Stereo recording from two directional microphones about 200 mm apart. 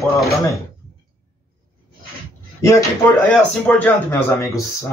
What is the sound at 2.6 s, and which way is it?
Speech, 10° left (ahead or behind).